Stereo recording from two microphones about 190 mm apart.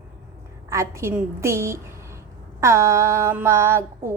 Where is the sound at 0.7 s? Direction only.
15° right (ahead or behind).